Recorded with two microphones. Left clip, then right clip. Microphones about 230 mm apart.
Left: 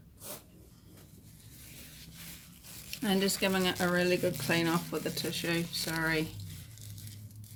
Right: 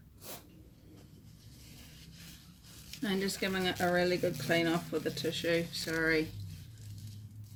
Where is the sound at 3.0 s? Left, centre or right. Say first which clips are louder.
Left 4 dB; left.